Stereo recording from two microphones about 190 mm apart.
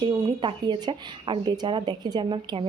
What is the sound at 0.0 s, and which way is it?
Speech, 25° right (ahead or behind).